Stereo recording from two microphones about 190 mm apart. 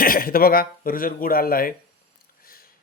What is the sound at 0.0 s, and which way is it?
Speech, 50° left (ahead or behind).